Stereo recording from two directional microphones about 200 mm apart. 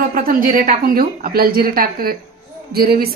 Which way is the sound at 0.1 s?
45° right (ahead or behind).